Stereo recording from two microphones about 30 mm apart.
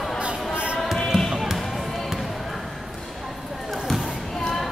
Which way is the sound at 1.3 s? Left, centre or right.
Centre.